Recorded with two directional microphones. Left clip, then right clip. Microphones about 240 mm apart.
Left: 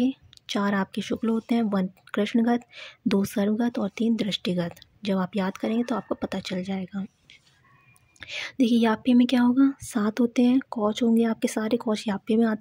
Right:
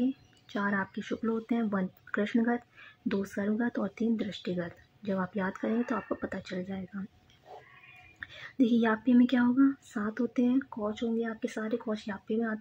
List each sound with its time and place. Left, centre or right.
0.5 s speech: left
8.2 s speech: left
10.7 s speech: left
11.0 s speech: left